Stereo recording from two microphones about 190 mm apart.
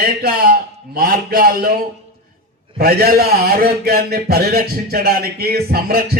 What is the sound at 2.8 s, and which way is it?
A man's voice, 55° right (ahead or behind).